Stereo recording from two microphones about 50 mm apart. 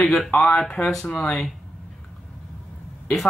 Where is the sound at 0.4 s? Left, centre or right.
Centre.